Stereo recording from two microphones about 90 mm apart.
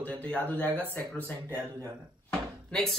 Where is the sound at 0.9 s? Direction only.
15° left (ahead or behind).